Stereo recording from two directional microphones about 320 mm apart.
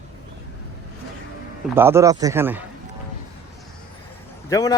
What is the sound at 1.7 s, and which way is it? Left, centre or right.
Speech, centre.